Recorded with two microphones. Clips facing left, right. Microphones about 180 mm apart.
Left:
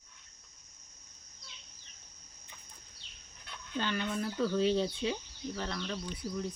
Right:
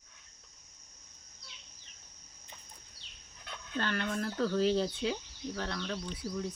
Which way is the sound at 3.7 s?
5° left (ahead or behind).